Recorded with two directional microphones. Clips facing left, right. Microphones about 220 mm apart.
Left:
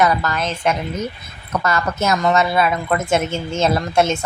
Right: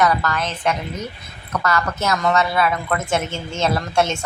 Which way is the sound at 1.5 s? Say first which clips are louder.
Left 2 dB; 25° left (ahead or behind).